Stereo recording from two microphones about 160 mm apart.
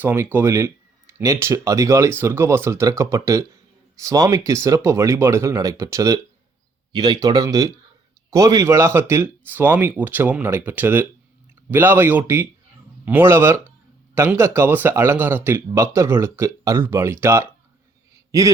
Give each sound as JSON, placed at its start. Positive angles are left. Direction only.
{"t": 0.0, "sound": "a man's voice", "side_deg": -10}